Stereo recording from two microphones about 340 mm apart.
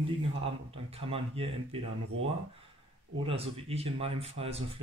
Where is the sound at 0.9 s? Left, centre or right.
Centre.